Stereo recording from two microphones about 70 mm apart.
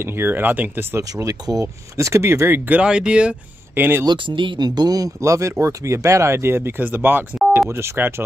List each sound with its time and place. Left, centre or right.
0.0 s speech: right
1.1 s speech: right
2.0 s speech: right
2.7 s speech: centre
3.7 s speech: right
4.0 s speech: right